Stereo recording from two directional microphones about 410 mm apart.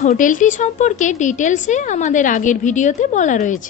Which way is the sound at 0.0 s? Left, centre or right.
Centre.